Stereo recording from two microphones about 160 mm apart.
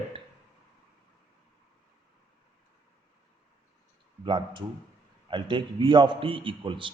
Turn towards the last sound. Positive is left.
turn(degrees=-30)  # may be behind; listen again after turning